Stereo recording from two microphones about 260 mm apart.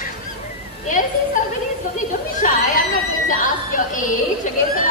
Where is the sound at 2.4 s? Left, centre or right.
Left.